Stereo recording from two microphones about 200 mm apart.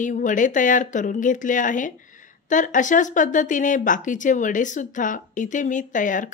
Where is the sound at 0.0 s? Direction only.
40° left (ahead or behind).